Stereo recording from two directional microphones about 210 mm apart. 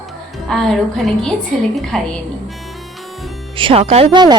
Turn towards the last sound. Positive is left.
turn(degrees=-25)  # may be behind; listen again after turning